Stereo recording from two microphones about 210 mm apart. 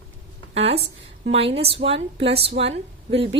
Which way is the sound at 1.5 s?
25° right (ahead or behind).